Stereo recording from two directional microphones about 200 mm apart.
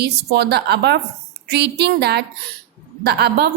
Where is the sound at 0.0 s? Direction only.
55° right (ahead or behind).